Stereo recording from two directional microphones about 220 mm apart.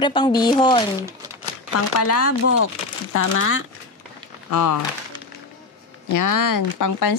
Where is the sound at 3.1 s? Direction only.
70° left (ahead or behind).